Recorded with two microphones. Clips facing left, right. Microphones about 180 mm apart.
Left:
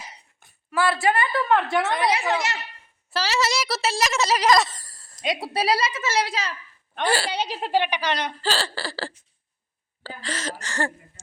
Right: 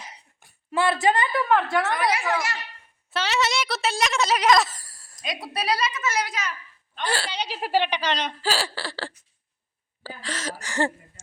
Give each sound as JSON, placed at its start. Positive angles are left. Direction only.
{"t": 0.3, "sound": "speech", "side_deg": -25}
{"t": 1.8, "sound": "a woman's voice", "side_deg": 25}
{"t": 3.1, "sound": "a woman's voice", "side_deg": 0}
{"t": 5.1, "sound": "a woman's voice", "side_deg": 25}
{"t": 7.1, "sound": "speech", "side_deg": 10}
{"t": 7.3, "sound": "speech", "side_deg": 45}
{"t": 7.6, "sound": "speech", "side_deg": 15}
{"t": 8.4, "sound": "a woman's voice", "side_deg": -5}
{"t": 10.0, "sound": "speech", "side_deg": -10}
{"t": 10.2, "sound": "a woman's voice", "side_deg": 0}
{"t": 10.6, "sound": "speech", "side_deg": -15}